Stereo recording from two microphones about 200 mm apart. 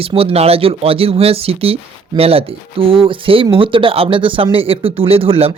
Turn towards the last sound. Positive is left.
turn(degrees=-30)  # may be behind; listen again after turning